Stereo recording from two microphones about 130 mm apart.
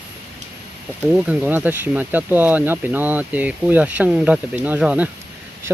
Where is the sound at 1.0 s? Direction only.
10° right (ahead or behind).